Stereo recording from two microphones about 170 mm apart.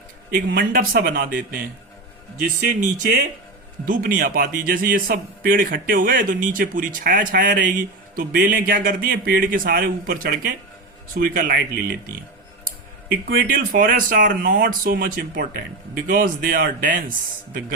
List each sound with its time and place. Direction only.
0.5 s a man's voice: 55° right (ahead or behind)
2.4 s a man's voice: 55° right (ahead or behind)
13.2 s a man's voice: 55° right (ahead or behind)